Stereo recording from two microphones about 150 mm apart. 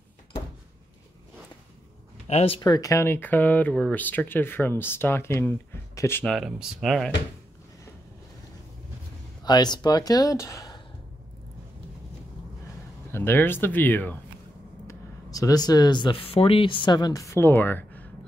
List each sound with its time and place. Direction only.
2.2 s speech: 40° left (ahead or behind); by 6.2 s 15° left (ahead or behind)
6.2 s speech: centre (ahead or behind)
9.4 s speech: 25° left (ahead or behind)
13.1 s speech: 15° left (ahead or behind)
14.9 s speech: 25° left (ahead or behind)